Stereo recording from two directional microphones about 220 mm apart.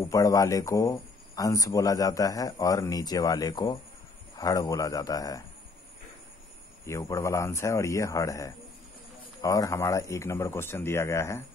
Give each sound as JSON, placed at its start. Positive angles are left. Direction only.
{"t": 0.1, "sound": "speech", "side_deg": 15}
{"t": 6.9, "sound": "speech", "side_deg": 10}